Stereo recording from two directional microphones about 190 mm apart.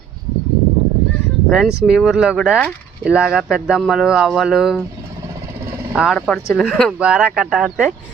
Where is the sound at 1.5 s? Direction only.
5° right (ahead or behind).